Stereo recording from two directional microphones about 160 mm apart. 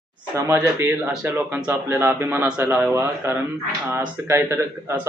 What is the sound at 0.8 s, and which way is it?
A man's voice, 15° right (ahead or behind).